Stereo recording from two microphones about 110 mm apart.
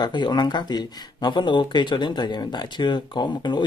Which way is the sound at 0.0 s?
40° left (ahead or behind).